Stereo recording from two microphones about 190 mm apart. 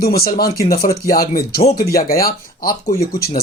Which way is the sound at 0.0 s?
50° left (ahead or behind).